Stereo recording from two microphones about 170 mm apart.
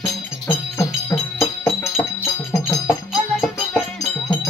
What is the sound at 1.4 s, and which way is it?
Music, 15° left (ahead or behind).